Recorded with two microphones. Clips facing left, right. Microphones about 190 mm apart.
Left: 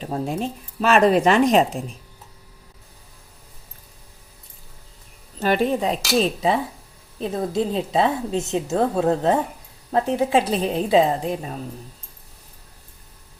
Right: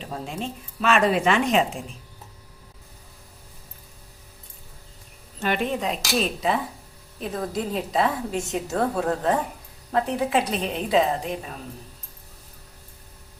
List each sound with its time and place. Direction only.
0.0 s speech: 40° left (ahead or behind)
5.4 s a woman's voice: 35° left (ahead or behind)